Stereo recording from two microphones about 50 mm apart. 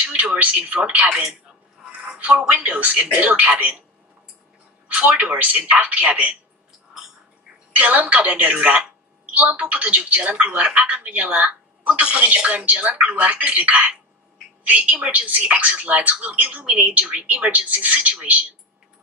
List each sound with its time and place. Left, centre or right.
0.0 s speech: right
2.2 s speech: right
4.8 s a sound: right
5.2 s speech: right
7.7 s a woman's voice: right